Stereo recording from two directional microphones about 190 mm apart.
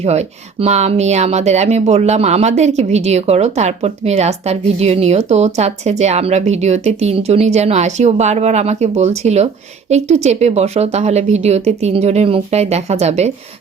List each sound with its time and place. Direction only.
0.0 s speech: 35° right (ahead or behind)